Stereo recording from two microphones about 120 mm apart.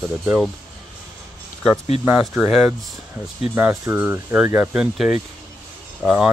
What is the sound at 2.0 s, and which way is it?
Speech, 10° right (ahead or behind).